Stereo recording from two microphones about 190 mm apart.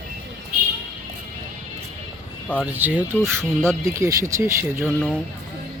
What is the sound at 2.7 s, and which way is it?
Speech, 10° right (ahead or behind).